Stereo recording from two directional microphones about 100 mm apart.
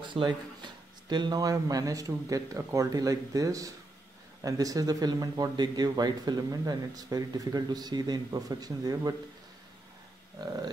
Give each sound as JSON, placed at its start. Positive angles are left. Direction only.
{"t": 0.0, "sound": "speech", "side_deg": -50}